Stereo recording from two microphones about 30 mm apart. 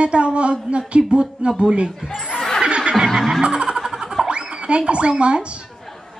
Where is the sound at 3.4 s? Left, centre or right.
Right.